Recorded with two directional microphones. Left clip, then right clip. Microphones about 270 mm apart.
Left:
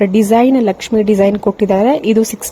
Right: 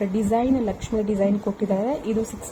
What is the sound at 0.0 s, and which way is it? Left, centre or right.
A woman's voice, left.